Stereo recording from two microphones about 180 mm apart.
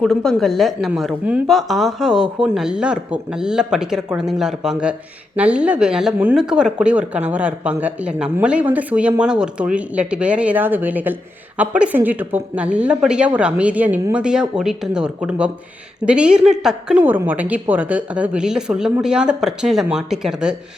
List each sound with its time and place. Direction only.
0.0 s speech: 5° left (ahead or behind)